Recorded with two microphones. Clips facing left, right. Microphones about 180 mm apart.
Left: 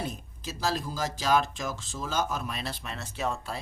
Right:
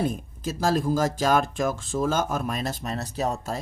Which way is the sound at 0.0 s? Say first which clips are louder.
Right 9 dB; 50° right (ahead or behind).